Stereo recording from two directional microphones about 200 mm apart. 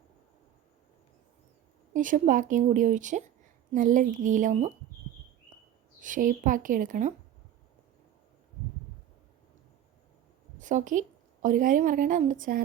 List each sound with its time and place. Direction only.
1.9 s a woman's voice: 40° right (ahead or behind)
6.0 s a woman's voice: 40° right (ahead or behind)
10.6 s a woman's voice: 40° right (ahead or behind)